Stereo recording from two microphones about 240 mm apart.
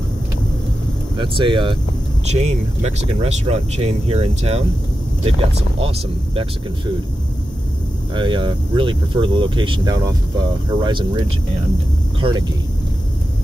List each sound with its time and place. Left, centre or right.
1.1 s speech: centre
8.1 s speech: centre